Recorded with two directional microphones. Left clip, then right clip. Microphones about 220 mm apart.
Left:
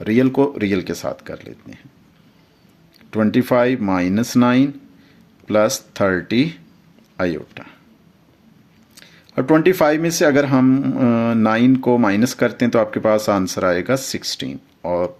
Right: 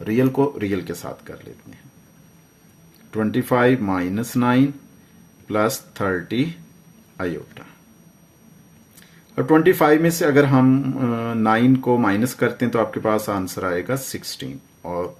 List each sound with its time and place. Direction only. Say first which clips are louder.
0.0 s speech: left 3 dB; 30° left (ahead or behind)
3.1 s speech: left 4 dB; 35° left (ahead or behind)
9.0 s speech: left 2 dB; 35° left (ahead or behind)